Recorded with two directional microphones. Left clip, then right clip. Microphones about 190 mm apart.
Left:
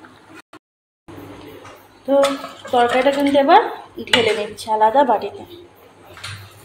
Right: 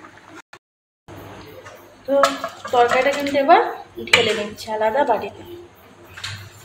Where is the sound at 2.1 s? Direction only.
15° left (ahead or behind).